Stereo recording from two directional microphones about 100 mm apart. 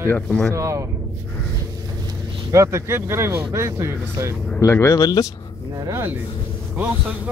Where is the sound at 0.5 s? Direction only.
30° right (ahead or behind).